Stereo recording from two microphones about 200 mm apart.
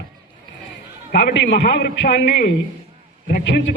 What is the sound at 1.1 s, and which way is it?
A man's voice, 50° left (ahead or behind).